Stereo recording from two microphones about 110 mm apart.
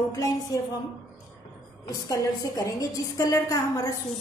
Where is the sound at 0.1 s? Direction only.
30° left (ahead or behind).